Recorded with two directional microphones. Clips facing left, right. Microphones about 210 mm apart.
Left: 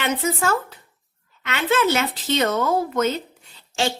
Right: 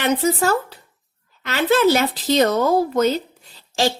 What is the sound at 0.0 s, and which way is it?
Speech, 35° right (ahead or behind).